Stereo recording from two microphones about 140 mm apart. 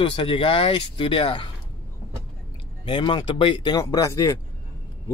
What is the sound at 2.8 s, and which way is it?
Speech, 35° left (ahead or behind).